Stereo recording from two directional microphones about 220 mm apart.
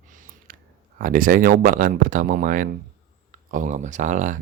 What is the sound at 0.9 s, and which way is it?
Speech, 40° right (ahead or behind).